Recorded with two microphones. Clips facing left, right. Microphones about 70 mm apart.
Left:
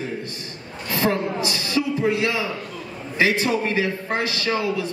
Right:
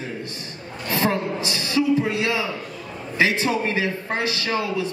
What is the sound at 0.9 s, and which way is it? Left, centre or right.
Speech, right.